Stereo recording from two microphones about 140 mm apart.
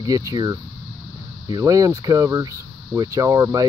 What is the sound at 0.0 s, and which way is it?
Speech, 25° right (ahead or behind).